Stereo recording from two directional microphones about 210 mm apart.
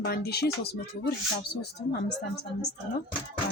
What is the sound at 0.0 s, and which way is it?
Speech, 50° left (ahead or behind).